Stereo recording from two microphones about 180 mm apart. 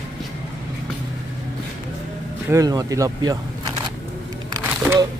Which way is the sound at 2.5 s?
20° right (ahead or behind).